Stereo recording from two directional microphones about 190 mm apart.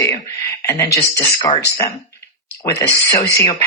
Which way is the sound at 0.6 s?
15° left (ahead or behind).